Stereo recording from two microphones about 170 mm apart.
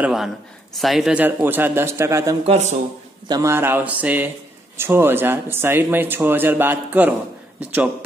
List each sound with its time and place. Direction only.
0.0 s speech: centre (ahead or behind)
2.4 s speech: 40° right (ahead or behind)
3.3 s speech: 20° right (ahead or behind)